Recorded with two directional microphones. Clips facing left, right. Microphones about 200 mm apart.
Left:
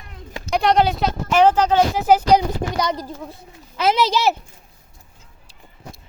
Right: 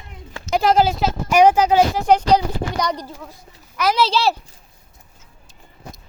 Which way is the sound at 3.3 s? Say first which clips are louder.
Left 4 dB; 25° left (ahead or behind).